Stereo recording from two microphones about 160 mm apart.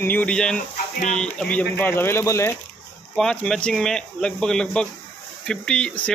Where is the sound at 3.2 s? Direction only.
5° left (ahead or behind).